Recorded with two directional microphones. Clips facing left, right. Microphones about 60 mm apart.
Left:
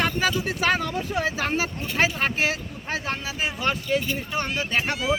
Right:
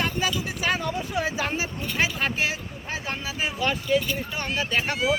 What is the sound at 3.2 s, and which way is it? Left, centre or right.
Speech, left.